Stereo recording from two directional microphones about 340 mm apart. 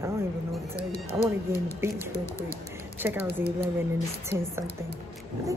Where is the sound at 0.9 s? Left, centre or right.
Centre.